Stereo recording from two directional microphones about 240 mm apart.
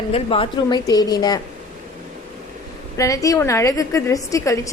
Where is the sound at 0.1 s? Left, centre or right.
Left.